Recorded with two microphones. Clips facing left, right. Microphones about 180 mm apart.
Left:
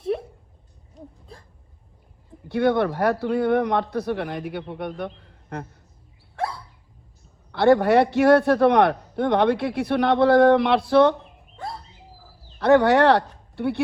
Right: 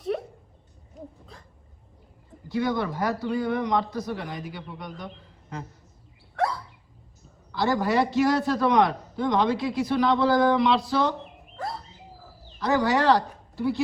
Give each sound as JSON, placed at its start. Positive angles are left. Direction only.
{"t": 2.5, "sound": "a man's voice", "side_deg": 65}
{"t": 7.5, "sound": "a man's voice", "side_deg": 60}
{"t": 12.5, "sound": "speech", "side_deg": 60}